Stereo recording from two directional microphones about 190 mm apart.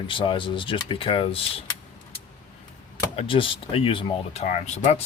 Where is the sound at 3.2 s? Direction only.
25° left (ahead or behind).